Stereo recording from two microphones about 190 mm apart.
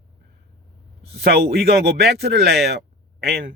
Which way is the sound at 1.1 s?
55° right (ahead or behind).